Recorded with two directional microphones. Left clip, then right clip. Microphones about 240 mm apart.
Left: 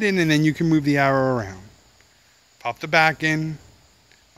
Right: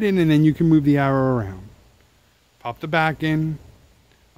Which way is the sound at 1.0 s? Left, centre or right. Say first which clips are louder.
Left 1 dB; right.